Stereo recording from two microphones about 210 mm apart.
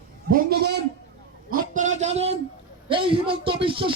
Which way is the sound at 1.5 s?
35° right (ahead or behind).